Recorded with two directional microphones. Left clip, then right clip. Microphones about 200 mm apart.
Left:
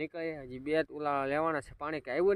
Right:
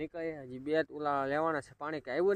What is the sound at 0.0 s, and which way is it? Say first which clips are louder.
Speech: left 1 dB; 5° left (ahead or behind).